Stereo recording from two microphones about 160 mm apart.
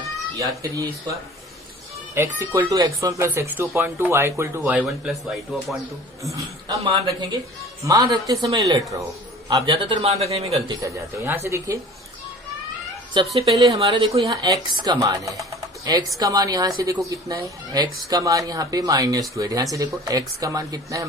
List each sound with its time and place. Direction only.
2.1 s speech: 15° right (ahead or behind); by 5.7 s centre (ahead or behind)
6.8 s a man's voice: 35° right (ahead or behind)
7.9 s a woman's voice: 20° right (ahead or behind); by 10.8 s 40° right (ahead or behind)
10.8 s speech: 20° right (ahead or behind)
13.1 s a woman's voice: 25° right (ahead or behind)
14.3 s a woman's voice: 25° right (ahead or behind)